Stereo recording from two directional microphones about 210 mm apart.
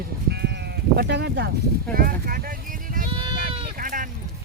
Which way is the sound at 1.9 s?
45° right (ahead or behind).